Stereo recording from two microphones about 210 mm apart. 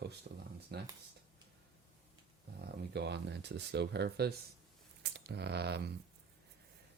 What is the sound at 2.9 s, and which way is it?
Speech, 55° right (ahead or behind).